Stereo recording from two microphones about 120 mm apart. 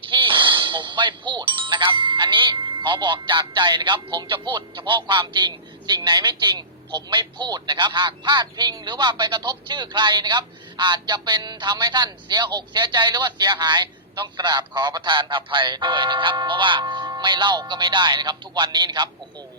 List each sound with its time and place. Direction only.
0.0 s speech: 45° right (ahead or behind)